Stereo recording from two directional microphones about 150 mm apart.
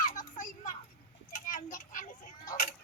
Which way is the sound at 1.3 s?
65° left (ahead or behind).